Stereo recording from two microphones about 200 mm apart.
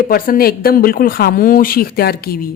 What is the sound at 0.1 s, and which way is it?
A woman's voice, 45° left (ahead or behind).